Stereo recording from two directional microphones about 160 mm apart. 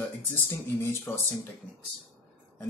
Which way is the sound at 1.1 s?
15° left (ahead or behind).